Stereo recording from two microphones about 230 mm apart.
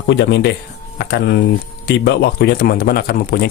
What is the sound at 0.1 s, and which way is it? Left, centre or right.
Speech, left.